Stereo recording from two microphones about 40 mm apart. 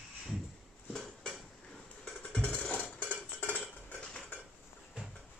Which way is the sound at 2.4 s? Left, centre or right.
Left.